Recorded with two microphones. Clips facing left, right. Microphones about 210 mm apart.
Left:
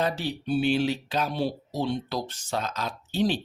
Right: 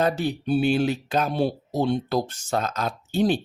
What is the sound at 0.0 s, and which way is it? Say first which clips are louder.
Speech: right 5 dB; 50° right (ahead or behind).